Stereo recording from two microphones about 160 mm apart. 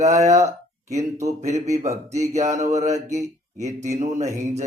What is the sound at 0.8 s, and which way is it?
Mantra, 45° right (ahead or behind).